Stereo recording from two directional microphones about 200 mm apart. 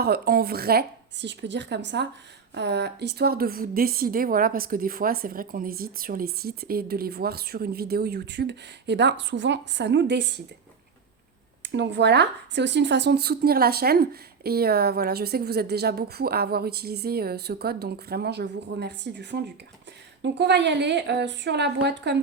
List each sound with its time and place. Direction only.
0.0 s speech: 50° right (ahead or behind)
11.6 s speech: 60° right (ahead or behind)